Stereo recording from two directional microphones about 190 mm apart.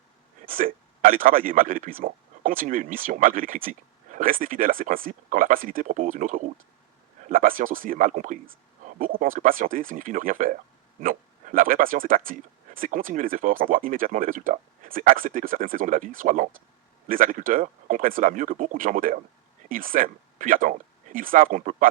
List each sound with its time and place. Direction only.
0.4 s a man's voice: 45° right (ahead or behind)